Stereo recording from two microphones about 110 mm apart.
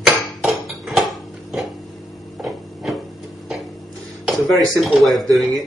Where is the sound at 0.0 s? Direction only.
Centre (ahead or behind).